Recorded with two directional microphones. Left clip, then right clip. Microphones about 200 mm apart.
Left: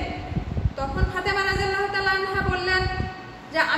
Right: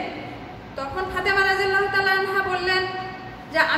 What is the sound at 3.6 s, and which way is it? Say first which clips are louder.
Speech: right 2 dB; 10° left (ahead or behind).